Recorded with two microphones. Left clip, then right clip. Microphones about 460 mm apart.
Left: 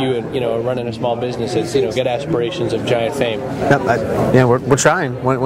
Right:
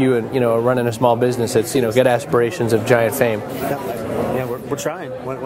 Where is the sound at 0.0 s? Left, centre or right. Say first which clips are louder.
Right 2 dB; right.